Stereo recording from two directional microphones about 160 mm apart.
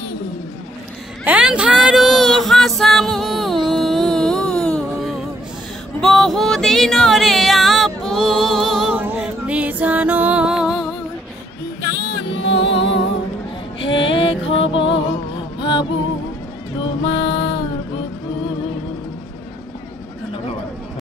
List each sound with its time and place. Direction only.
1.2 s music: 5° right (ahead or behind)
12.6 s music: 35° left (ahead or behind)
17.0 s music: 30° left (ahead or behind)